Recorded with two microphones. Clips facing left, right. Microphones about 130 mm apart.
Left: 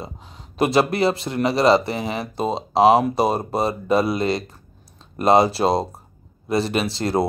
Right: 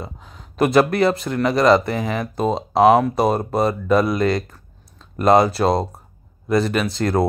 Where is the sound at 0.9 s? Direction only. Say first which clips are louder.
Right 2 dB; 50° right (ahead or behind).